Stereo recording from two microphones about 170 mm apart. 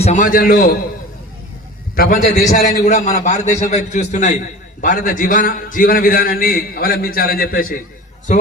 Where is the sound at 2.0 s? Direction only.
55° left (ahead or behind).